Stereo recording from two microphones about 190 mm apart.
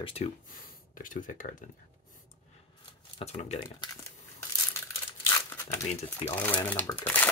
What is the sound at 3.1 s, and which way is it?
Speech, 30° left (ahead or behind).